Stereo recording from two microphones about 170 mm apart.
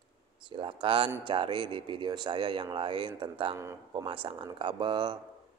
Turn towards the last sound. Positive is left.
turn(degrees=-30)  # may be behind; listen again after turning